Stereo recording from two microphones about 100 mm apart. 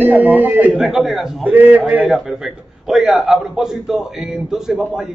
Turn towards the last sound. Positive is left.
turn(degrees=-5)  # may be behind; listen again after turning